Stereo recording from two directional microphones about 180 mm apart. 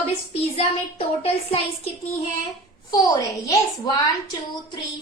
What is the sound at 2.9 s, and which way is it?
A woman's voice, 20° left (ahead or behind).